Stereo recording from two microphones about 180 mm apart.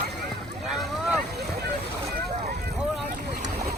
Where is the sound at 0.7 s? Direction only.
Centre (ahead or behind).